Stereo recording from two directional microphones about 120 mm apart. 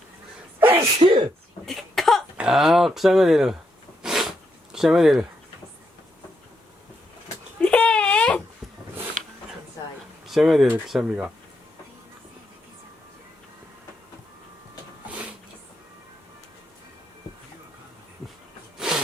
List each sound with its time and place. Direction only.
0.6 s sneeze: 20° right (ahead or behind)
0.9 s speech: 55° right (ahead or behind)
1.6 s cough: centre (ahead or behind)
2.4 s speech: 5° right (ahead or behind)
4.0 s a sound: 5° right (ahead or behind)
4.7 s speech: centre (ahead or behind)
7.6 s a sound: 10° left (ahead or behind)
10.2 s speech: centre (ahead or behind)
18.8 s a sound: 5° right (ahead or behind)